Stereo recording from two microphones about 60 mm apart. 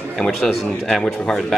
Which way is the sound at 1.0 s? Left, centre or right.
Centre.